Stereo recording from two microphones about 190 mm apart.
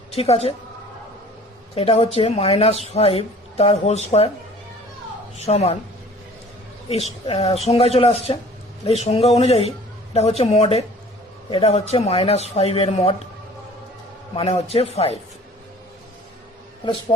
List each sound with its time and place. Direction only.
0.1 s a woman's voice: 30° left (ahead or behind)
1.7 s speech: 30° left (ahead or behind)
5.4 s speech: 35° left (ahead or behind)
6.8 s speech: 30° left (ahead or behind)
14.3 s speech: 30° left (ahead or behind)